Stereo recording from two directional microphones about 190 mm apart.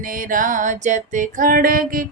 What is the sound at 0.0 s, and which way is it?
Music, 45° right (ahead or behind).